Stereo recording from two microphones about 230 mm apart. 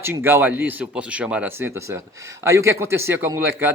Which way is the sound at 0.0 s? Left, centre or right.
Centre.